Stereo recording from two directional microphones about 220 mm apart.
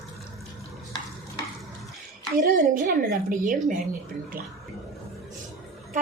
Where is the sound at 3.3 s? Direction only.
35° right (ahead or behind).